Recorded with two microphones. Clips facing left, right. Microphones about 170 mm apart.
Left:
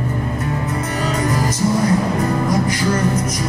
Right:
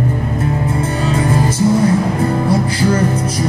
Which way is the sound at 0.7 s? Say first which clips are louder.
Right 4 dB; 30° right (ahead or behind).